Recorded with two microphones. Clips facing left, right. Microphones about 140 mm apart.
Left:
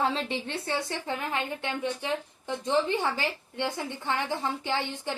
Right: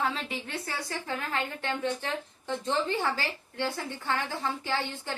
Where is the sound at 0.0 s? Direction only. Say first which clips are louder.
Left 3 dB; 30° left (ahead or behind).